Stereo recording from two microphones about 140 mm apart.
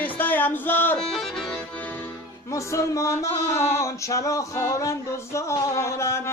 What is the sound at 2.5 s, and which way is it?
Male singing, 20° left (ahead or behind).